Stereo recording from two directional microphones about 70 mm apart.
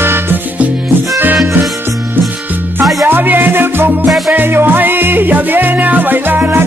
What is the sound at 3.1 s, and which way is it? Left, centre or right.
Music, right.